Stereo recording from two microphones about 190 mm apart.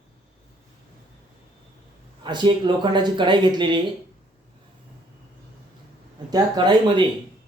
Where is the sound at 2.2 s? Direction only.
25° right (ahead or behind).